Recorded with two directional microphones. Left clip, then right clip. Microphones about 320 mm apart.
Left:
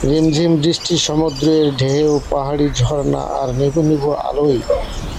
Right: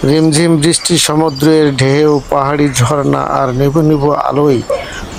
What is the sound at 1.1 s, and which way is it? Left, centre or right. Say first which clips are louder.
Speech: right 5 dB; right.